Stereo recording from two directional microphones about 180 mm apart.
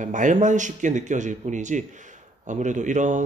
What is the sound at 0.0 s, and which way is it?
A man's voice, 45° right (ahead or behind).